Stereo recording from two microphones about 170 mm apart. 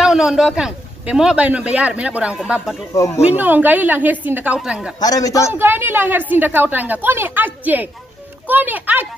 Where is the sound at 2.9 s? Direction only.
20° left (ahead or behind).